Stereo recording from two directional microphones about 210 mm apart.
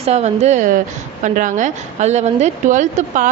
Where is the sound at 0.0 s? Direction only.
30° right (ahead or behind).